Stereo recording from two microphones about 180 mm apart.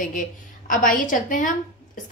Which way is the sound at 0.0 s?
45° left (ahead or behind).